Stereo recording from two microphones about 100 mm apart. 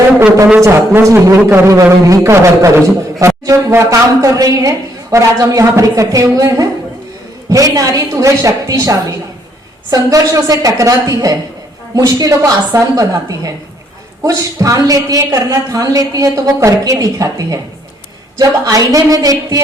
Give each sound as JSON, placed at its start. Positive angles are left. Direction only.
{"t": 0.6, "sound": "a man's voice", "side_deg": -25}
{"t": 14.3, "sound": "a man's voice", "side_deg": -35}